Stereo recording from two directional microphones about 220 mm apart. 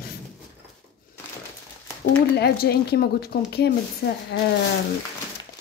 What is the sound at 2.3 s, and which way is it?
Speech, 45° left (ahead or behind).